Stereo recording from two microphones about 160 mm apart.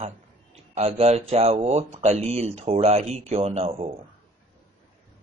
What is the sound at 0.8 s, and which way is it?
Speech, 40° right (ahead or behind).